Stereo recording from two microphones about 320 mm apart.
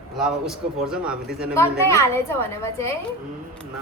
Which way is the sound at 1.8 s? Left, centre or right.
Centre.